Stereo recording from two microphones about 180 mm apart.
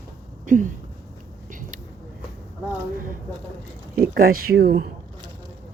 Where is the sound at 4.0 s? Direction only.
55° right (ahead or behind).